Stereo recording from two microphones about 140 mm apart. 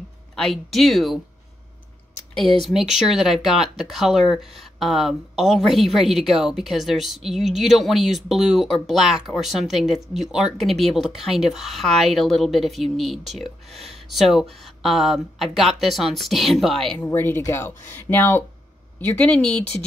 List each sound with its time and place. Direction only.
0.4 s speech: centre (ahead or behind)
2.3 s speech: centre (ahead or behind)
17.1 s speech: 15° left (ahead or behind)